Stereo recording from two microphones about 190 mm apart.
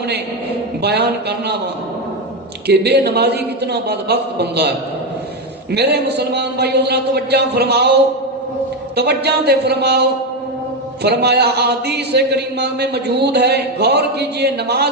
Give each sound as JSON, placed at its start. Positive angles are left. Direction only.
{"t": 0.8, "sound": "speech", "side_deg": -60}
{"t": 2.6, "sound": "speech", "side_deg": -60}
{"t": 5.7, "sound": "speech", "side_deg": -60}
{"t": 9.0, "sound": "speech", "side_deg": -60}